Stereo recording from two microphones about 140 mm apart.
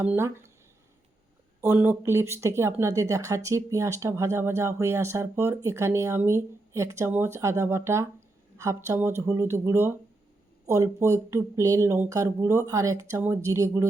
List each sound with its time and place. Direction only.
0.0 s speech: 15° right (ahead or behind)
1.6 s speech: 15° right (ahead or behind)